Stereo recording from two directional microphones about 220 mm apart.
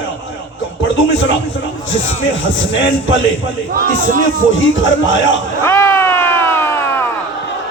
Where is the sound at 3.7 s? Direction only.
40° right (ahead or behind).